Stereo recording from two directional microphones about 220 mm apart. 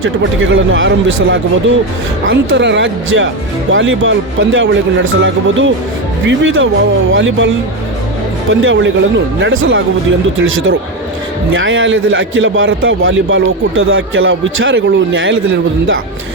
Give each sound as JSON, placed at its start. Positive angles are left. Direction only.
{"t": 0.5, "sound": "a man's voice", "side_deg": -60}